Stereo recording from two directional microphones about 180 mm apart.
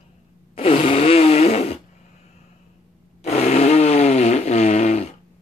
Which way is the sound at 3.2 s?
35° left (ahead or behind).